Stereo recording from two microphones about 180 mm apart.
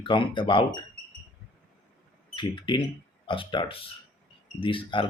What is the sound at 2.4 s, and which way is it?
Speech, 25° left (ahead or behind).